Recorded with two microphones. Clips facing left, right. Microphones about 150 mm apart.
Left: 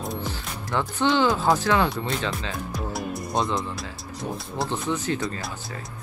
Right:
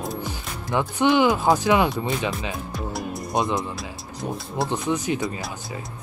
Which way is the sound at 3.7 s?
Centre (ahead or behind).